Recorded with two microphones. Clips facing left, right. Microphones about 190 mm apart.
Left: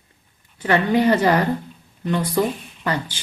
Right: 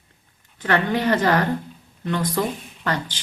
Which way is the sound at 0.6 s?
10° left (ahead or behind).